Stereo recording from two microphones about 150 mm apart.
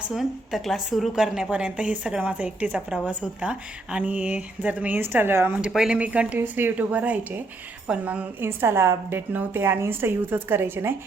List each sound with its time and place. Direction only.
0.1 s a woman's voice: centre (ahead or behind)